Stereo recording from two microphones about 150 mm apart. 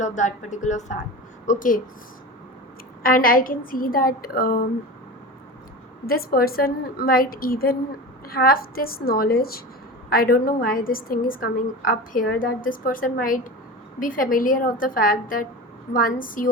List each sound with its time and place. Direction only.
0.0 s a woman's voice: 55° left (ahead or behind)
3.0 s a woman's voice: 70° left (ahead or behind)
6.1 s a woman's voice: 80° left; by 16.5 s 65° left (ahead or behind)